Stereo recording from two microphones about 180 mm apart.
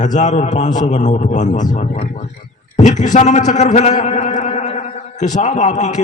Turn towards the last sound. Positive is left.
turn(degrees=40)  # may be behind; listen again after turning